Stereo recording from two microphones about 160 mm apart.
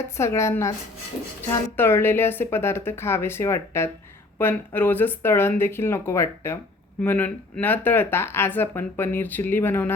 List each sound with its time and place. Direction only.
0.2 s speech: 15° left (ahead or behind)